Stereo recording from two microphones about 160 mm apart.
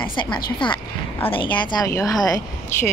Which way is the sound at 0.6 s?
30° left (ahead or behind).